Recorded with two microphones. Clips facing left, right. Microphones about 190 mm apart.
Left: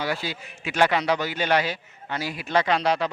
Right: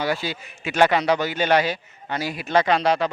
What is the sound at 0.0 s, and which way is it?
Speech, 25° right (ahead or behind).